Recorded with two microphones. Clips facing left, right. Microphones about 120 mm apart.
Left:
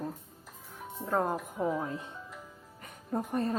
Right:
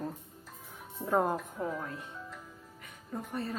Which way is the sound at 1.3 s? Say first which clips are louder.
Left 4 dB; 15° left (ahead or behind).